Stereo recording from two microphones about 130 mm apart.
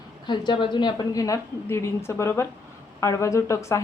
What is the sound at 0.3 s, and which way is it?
Speech, 35° left (ahead or behind).